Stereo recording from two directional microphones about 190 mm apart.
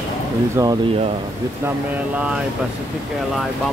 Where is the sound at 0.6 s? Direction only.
15° right (ahead or behind).